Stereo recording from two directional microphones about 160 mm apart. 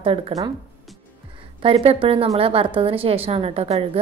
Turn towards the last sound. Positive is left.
turn(degrees=-40)  # may be behind; listen again after turning